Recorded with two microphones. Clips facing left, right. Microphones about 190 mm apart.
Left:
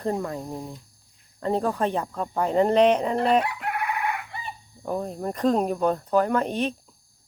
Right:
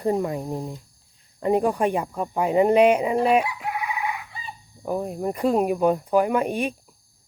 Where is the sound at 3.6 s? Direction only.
60° left (ahead or behind).